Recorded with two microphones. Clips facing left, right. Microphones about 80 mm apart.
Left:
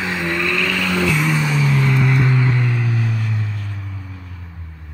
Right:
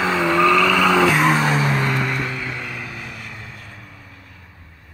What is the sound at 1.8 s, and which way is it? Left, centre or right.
Music, right.